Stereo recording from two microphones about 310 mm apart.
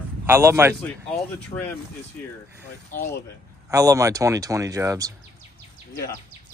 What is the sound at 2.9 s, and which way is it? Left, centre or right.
Speech, left.